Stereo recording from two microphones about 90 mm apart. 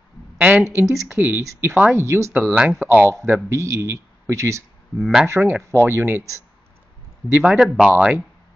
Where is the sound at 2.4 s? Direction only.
Centre (ahead or behind).